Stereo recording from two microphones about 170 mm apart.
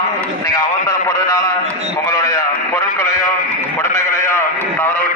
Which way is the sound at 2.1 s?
20° left (ahead or behind).